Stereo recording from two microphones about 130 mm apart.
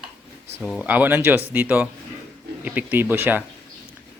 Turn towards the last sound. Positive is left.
turn(degrees=-15)  # may be behind; listen again after turning